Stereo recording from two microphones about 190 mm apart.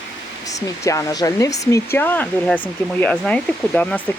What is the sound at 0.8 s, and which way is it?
Speech, 15° left (ahead or behind).